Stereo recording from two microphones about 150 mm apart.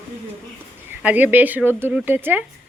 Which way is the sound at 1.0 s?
10° right (ahead or behind).